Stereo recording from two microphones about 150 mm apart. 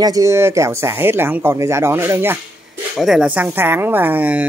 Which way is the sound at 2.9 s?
Centre (ahead or behind).